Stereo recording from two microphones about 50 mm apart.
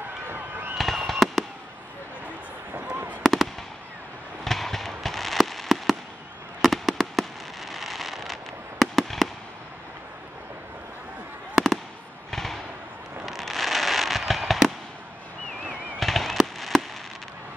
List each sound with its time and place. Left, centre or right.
0.3 s fireworks: right
0.9 s fireworks: centre
3.2 s fireworks: centre
4.5 s fireworks: centre
11.5 s fireworks: centre